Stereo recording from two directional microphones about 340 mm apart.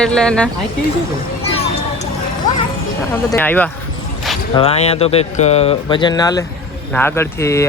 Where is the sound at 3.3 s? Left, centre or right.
Centre.